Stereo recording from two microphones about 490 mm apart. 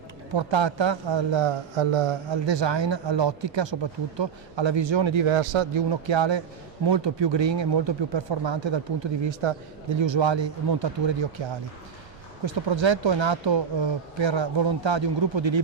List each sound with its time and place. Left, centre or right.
0.3 s speech: right
5.9 s speech: right
9.2 s speech: right
12.5 s speech: right